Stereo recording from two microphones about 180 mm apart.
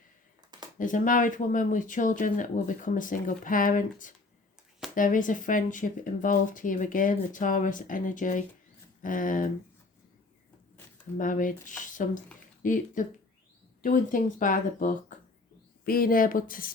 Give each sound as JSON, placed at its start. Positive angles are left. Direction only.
{"t": 0.8, "sound": "speech", "side_deg": 45}
{"t": 11.2, "sound": "speech", "side_deg": 45}